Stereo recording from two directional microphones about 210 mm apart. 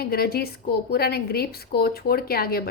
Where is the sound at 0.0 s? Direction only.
45° left (ahead or behind).